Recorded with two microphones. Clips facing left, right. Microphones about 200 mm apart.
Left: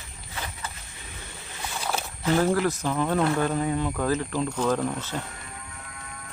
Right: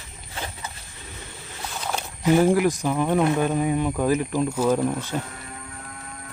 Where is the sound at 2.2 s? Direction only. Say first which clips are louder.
Right 5 dB; 15° right (ahead or behind).